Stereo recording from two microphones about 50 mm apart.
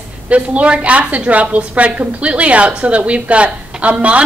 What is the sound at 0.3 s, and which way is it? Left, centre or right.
A woman's voice, right.